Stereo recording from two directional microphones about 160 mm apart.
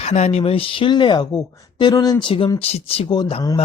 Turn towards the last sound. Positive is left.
turn(degrees=25)  # may be behind; listen again after turning